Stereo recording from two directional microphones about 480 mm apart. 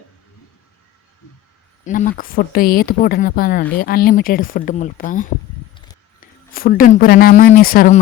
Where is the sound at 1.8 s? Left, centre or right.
Centre.